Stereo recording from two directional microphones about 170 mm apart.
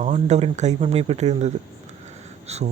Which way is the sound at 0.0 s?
45° right (ahead or behind).